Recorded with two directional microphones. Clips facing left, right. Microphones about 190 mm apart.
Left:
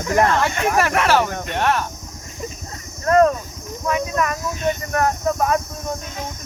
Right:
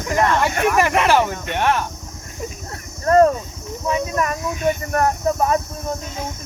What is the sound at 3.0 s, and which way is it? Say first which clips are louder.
Speech: right 1 dB; 30° right (ahead or behind).